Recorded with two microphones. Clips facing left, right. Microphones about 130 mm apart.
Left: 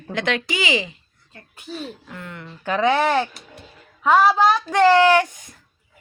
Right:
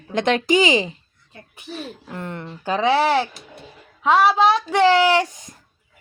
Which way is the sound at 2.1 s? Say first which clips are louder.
Right 5 dB; 30° right (ahead or behind).